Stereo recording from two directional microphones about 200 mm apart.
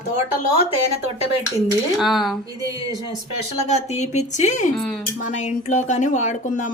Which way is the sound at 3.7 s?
35° left (ahead or behind).